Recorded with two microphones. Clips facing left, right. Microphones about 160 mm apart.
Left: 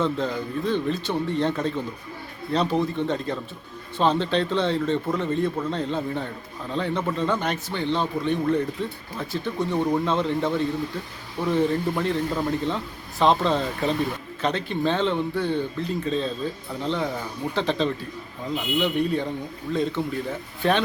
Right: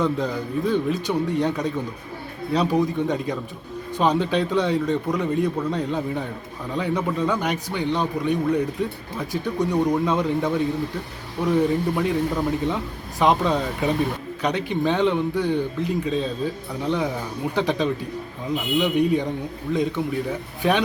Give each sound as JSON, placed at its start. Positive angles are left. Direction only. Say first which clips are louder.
{"t": 0.0, "sound": "speech", "louder": "right 1 dB", "side_deg": -10}